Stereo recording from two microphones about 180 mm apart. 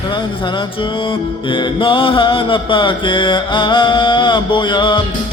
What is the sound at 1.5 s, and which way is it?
Music, 25° left (ahead or behind).